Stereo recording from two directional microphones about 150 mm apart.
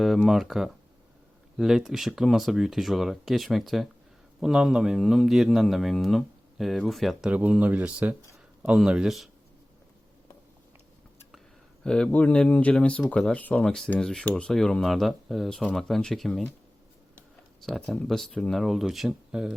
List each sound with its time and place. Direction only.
0.3 s speech: centre (ahead or behind)
11.8 s speech: 5° left (ahead or behind)
17.6 s speech: centre (ahead or behind)